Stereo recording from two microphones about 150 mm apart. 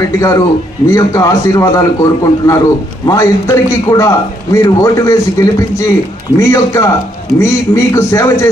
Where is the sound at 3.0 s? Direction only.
20° left (ahead or behind).